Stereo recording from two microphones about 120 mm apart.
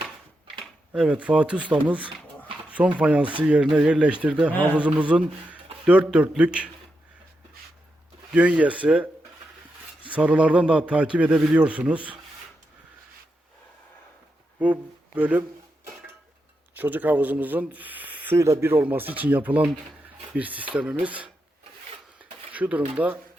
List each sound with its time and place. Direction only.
0.6 s a man's voice: 5° right (ahead or behind)
8.3 s a man's voice: 10° right (ahead or behind)
10.1 s a man's voice: 10° right (ahead or behind)
14.6 s a sound: 10° right (ahead or behind)
16.7 s speech: 15° right (ahead or behind)
18.3 s a man's voice: 25° right (ahead or behind)
22.5 s speech: 10° right (ahead or behind)